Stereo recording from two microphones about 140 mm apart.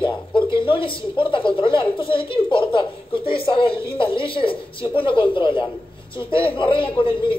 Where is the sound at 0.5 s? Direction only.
40° left (ahead or behind).